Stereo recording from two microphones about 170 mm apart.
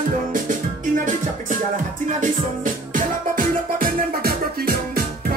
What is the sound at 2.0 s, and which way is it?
Music, 50° right (ahead or behind).